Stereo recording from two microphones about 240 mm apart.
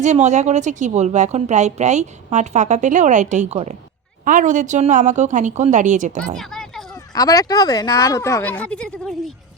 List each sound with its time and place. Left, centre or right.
0.0 s a woman's voice: right
6.3 s a sound: centre
6.9 s speech: centre